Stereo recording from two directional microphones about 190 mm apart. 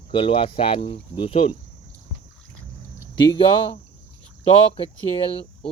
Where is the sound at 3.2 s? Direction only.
25° left (ahead or behind).